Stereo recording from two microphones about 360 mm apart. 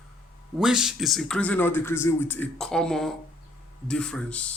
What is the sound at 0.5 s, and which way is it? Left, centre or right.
Speech, centre.